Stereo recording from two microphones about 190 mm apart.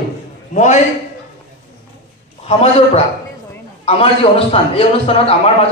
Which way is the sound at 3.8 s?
30° left (ahead or behind).